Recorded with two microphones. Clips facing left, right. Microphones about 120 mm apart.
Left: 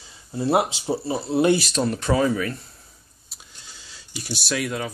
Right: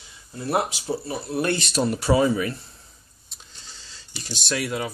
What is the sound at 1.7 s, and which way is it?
Speech, 5° right (ahead or behind).